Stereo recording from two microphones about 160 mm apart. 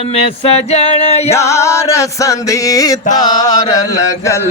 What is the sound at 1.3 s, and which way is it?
Chant, 20° left (ahead or behind).